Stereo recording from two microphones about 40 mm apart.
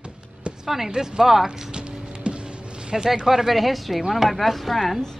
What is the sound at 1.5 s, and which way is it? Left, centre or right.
Music, right.